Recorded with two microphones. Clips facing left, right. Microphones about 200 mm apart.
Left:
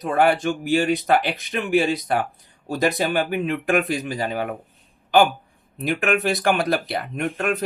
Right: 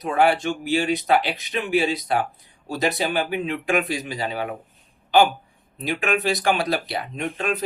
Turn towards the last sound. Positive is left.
turn(degrees=60)  # may be behind; listen again after turning